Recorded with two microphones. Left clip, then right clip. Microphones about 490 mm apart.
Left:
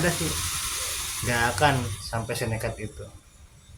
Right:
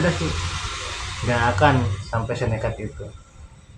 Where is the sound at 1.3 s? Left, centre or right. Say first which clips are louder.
Right 4 dB; left.